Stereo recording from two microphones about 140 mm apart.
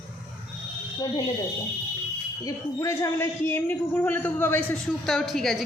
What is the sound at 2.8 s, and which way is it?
A man's voice, 20° left (ahead or behind).